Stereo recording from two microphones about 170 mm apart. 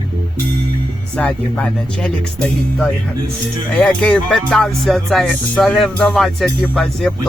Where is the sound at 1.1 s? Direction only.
5° left (ahead or behind).